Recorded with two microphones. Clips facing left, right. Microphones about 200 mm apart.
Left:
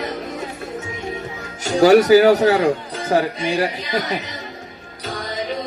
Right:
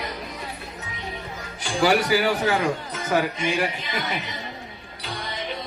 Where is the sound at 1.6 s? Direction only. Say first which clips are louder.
Left 9 dB; 45° left (ahead or behind).